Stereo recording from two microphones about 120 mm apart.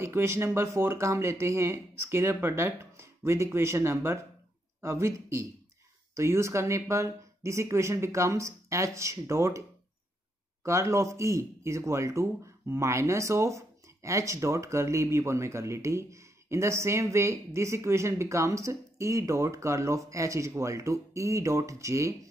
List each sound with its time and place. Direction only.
0.0 s speech: 20° right (ahead or behind)
10.6 s speech: 25° right (ahead or behind)